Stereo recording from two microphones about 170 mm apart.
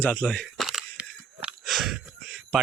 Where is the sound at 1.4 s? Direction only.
Centre (ahead or behind).